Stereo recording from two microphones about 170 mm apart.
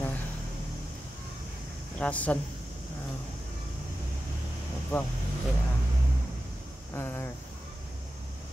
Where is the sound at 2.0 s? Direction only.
10° left (ahead or behind).